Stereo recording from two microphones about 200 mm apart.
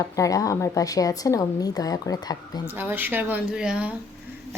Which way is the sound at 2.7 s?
10° right (ahead or behind).